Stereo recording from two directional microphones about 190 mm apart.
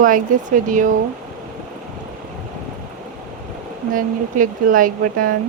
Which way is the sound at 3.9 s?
45° right (ahead or behind).